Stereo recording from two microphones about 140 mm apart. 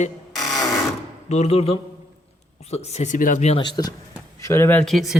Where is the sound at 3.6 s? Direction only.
30° left (ahead or behind).